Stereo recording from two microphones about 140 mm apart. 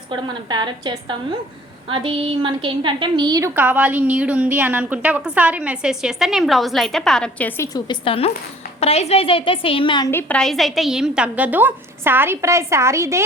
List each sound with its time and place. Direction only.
0.1 s a woman's voice: 30° right (ahead or behind)
3.5 s a woman's voice: 10° right (ahead or behind); by 7.8 s 20° left (ahead or behind)
7.9 s a woman's voice: 40° left (ahead or behind)
10.1 s a woman's voice: 15° left (ahead or behind); by 13.2 s 20° right (ahead or behind)